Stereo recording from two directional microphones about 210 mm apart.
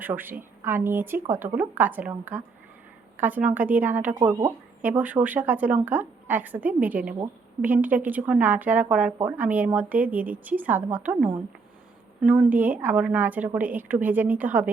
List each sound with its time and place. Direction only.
0.0 s speech: 10° right (ahead or behind)